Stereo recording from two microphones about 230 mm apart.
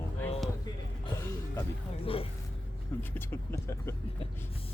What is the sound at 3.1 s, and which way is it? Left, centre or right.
Speech, centre.